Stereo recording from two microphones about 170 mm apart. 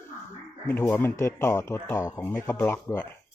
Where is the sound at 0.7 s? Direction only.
10° left (ahead or behind).